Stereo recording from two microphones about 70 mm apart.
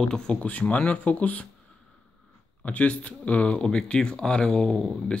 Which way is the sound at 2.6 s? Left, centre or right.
Centre.